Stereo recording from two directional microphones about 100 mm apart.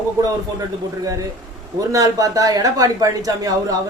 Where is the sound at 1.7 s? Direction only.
35° right (ahead or behind).